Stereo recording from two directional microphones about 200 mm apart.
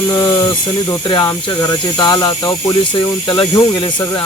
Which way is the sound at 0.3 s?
25° left (ahead or behind).